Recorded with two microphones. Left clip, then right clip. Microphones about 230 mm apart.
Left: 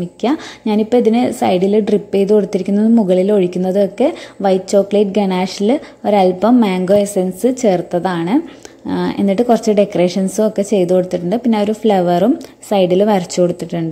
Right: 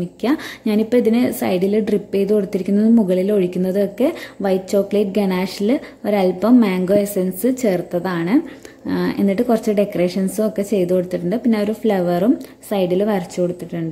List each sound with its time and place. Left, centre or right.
0.2 s a woman's voice: centre